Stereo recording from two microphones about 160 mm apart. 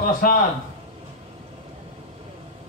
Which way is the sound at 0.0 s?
65° left (ahead or behind).